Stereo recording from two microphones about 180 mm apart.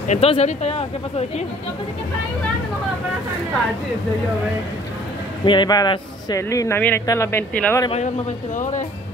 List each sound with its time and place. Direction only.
0.1 s speech: 35° left (ahead or behind)
5.4 s speech: 25° left (ahead or behind); by 7.8 s 10° left (ahead or behind)